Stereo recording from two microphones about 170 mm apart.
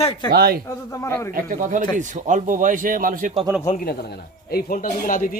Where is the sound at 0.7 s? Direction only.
20° left (ahead or behind).